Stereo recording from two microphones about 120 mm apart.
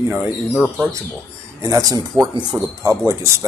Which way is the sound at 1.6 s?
30° right (ahead or behind).